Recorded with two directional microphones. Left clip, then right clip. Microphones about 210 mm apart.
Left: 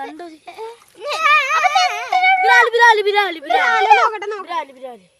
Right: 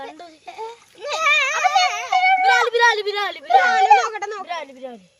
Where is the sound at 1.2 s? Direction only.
40° left (ahead or behind).